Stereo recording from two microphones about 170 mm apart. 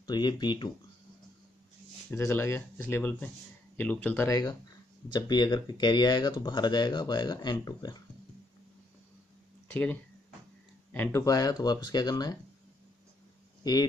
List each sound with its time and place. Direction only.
0.0 s speech: 25° left (ahead or behind)
2.1 s speech: 15° left (ahead or behind)
5.1 s speech: 25° left (ahead or behind)
9.7 s speech: 10° left (ahead or behind)